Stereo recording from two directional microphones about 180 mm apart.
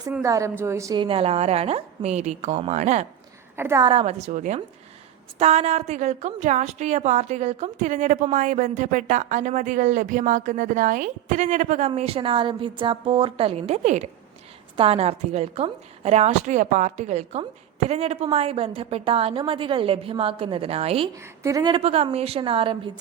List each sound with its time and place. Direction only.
0.2 s a woman's voice: 15° right (ahead or behind)
1.0 s a woman's voice: 30° right (ahead or behind)
3.5 s a woman's voice: 15° right (ahead or behind)
3.8 s a woman's voice: 35° right (ahead or behind)
11.9 s a woman's voice: 35° right (ahead or behind)
21.2 s a woman's voice: 20° right (ahead or behind)